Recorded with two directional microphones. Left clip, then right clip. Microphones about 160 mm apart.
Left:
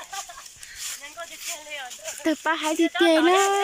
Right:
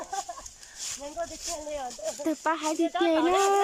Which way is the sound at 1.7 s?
35° right (ahead or behind).